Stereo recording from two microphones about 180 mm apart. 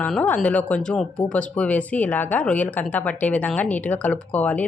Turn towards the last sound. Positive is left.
turn(degrees=10)  # may be behind; listen again after turning